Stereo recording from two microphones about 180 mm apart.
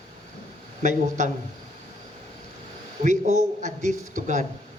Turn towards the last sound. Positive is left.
turn(degrees=-45)  # may be behind; listen again after turning